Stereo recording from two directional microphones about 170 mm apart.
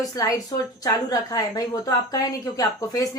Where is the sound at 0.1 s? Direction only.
20° left (ahead or behind).